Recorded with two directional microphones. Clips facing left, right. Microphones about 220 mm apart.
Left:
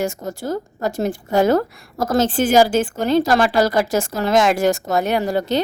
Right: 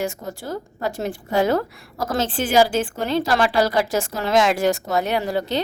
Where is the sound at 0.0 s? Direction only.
45° left (ahead or behind).